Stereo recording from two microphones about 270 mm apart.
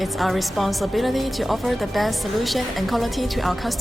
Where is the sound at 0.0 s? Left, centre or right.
Centre.